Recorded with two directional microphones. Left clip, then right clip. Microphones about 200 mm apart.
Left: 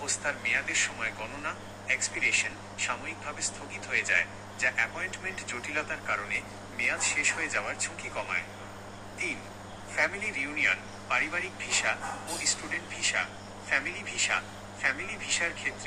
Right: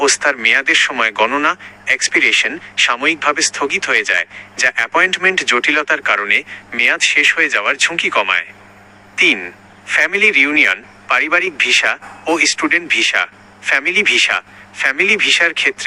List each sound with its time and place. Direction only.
0.0 s speech: 40° right (ahead or behind)
10.0 s speech: 45° right (ahead or behind)